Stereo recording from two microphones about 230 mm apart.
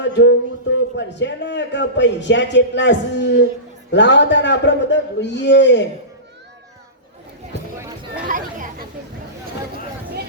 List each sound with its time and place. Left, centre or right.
0.0 s a man's voice: left
8.3 s chatter: right